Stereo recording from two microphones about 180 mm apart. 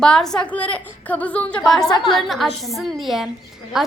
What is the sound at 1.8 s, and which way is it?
Speech, 25° left (ahead or behind).